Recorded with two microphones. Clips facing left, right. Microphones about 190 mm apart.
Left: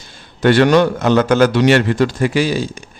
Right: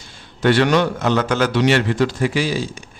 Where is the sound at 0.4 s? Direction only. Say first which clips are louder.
Left 4 dB; 50° left (ahead or behind).